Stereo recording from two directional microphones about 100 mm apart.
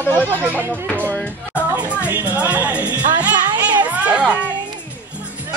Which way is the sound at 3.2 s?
15° right (ahead or behind).